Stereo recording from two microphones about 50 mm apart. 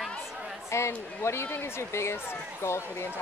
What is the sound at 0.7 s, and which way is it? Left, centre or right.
Speech, left.